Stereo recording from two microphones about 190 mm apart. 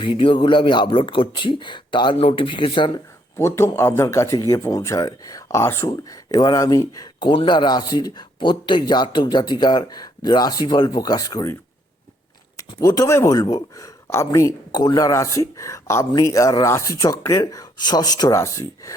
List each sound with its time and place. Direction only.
0.0 s speech: 25° left (ahead or behind)
3.3 s speech: 15° left (ahead or behind)
12.5 s speech: 20° left (ahead or behind)